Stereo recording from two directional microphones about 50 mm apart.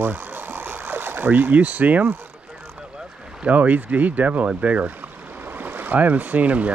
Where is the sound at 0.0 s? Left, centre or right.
Right.